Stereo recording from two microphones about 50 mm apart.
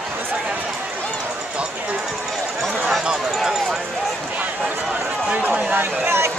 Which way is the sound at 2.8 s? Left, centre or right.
Centre.